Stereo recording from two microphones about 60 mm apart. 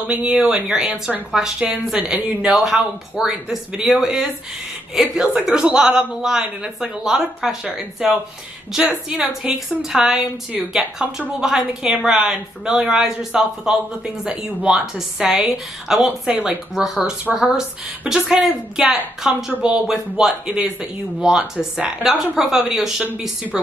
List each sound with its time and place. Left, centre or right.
0.0 s a woman's voice: centre
2.5 s a woman's voice: centre